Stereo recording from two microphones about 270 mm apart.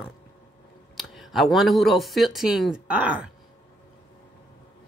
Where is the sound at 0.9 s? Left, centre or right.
Centre.